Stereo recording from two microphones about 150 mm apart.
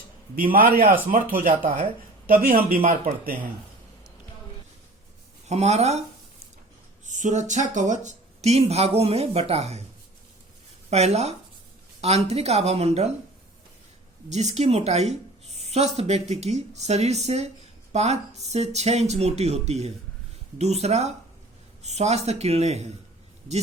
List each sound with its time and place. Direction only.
0.5 s speech: 70° right (ahead or behind)
5.5 s speech: 45° right (ahead or behind)
7.0 s speech: 55° right (ahead or behind)
10.8 s speech: 45° right (ahead or behind)
14.3 s speech: 50° right (ahead or behind)